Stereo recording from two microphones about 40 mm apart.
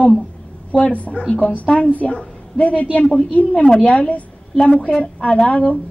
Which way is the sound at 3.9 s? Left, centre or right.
Left.